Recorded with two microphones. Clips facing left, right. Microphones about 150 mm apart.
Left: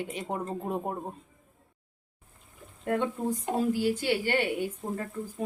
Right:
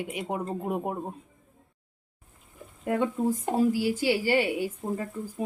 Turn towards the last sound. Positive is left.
turn(degrees=-10)  # may be behind; listen again after turning